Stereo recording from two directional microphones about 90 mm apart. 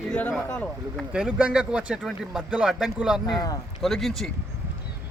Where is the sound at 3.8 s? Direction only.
Centre (ahead or behind).